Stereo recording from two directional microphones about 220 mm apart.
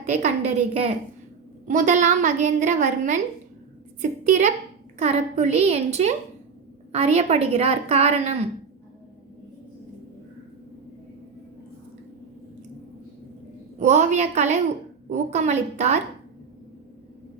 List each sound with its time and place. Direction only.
0.0 s a woman's voice: 30° right (ahead or behind)
4.2 s a woman's voice: 30° right (ahead or behind)
13.7 s a woman's voice: 30° right (ahead or behind)